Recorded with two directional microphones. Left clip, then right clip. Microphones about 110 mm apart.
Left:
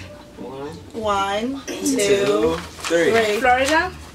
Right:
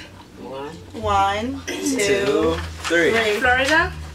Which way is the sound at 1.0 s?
15° left (ahead or behind).